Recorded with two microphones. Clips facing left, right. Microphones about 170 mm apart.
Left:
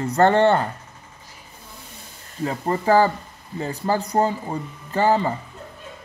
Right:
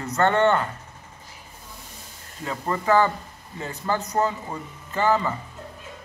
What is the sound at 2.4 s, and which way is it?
Speech, 30° left (ahead or behind).